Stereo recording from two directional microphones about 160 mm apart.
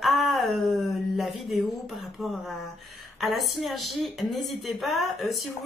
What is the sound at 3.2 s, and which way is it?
A woman's voice, centre (ahead or behind).